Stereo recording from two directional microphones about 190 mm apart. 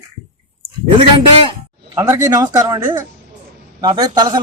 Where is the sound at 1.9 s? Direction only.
20° right (ahead or behind).